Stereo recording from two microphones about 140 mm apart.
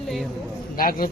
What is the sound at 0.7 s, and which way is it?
Speech, 90° left.